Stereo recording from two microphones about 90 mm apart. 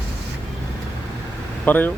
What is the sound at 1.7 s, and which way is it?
Speech, 20° left (ahead or behind).